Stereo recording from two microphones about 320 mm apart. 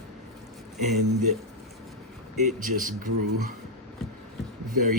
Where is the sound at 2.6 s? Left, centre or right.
Right.